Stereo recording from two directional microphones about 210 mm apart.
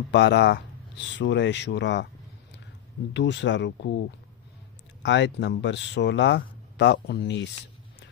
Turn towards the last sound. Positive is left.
turn(degrees=50)  # may be behind; listen again after turning